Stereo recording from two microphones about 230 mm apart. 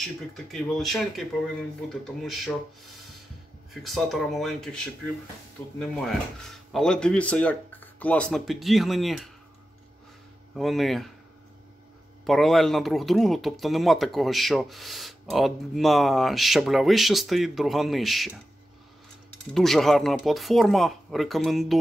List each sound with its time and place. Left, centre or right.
0.3 s speech: centre
3.7 s speech: centre
10.5 s speech: centre
12.3 s speech: centre
19.5 s speech: centre